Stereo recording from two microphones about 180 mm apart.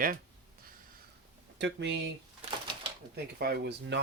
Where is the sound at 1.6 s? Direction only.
75° right (ahead or behind).